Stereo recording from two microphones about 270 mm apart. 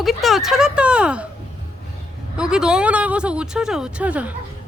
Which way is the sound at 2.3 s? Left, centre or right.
Centre.